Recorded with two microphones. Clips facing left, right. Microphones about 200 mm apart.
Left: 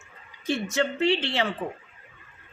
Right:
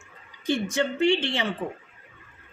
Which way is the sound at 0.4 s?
15° right (ahead or behind).